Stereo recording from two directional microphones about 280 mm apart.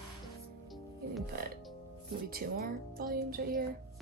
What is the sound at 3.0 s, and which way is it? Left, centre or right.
Speech, right.